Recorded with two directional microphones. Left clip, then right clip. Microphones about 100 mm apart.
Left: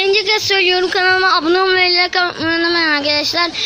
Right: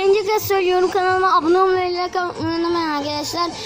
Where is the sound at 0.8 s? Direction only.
30° left (ahead or behind).